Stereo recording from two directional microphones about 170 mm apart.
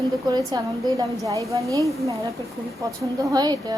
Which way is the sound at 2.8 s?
20° right (ahead or behind).